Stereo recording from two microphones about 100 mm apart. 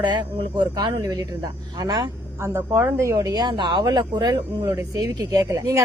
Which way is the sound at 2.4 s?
25° right (ahead or behind).